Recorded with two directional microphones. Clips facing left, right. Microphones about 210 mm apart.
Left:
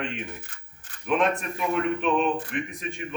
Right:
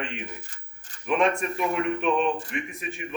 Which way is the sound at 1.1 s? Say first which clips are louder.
Right 1 dB; centre (ahead or behind).